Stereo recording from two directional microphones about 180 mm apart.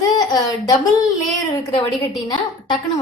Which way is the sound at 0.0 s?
20° left (ahead or behind).